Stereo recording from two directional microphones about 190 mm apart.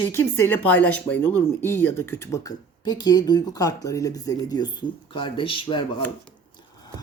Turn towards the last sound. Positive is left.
turn(degrees=25)  # may be behind; listen again after turning